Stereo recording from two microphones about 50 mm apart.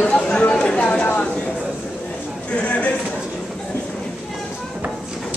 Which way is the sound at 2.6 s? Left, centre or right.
Left.